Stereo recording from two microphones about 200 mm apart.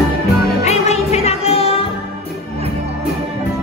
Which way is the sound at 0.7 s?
35° left (ahead or behind).